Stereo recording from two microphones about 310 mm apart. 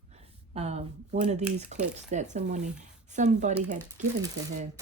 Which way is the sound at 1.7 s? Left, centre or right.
Right.